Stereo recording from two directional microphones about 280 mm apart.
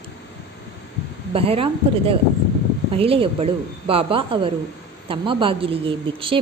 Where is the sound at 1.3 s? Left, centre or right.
Centre.